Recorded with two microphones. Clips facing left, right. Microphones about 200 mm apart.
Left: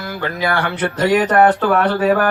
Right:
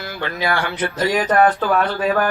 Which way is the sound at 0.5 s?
65° left (ahead or behind).